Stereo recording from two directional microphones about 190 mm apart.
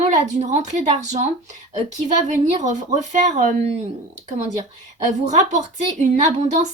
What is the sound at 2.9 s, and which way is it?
Speech, 40° right (ahead or behind).